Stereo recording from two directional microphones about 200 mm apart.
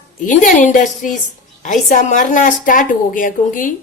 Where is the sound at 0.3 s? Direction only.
40° left (ahead or behind).